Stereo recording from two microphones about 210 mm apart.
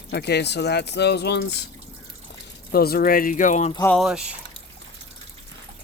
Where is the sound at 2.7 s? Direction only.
45° left (ahead or behind).